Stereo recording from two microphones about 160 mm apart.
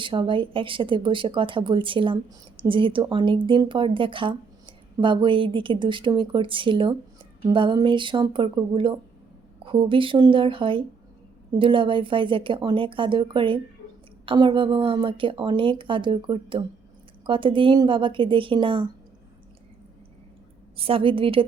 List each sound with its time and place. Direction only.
0.0 s speech: 30° right (ahead or behind)
20.7 s speech: 35° right (ahead or behind)